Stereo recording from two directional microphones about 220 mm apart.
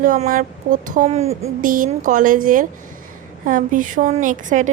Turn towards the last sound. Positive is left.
turn(degrees=-35)  # may be behind; listen again after turning